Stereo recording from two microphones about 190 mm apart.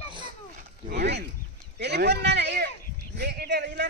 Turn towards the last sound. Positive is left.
turn(degrees=-65)  # may be behind; listen again after turning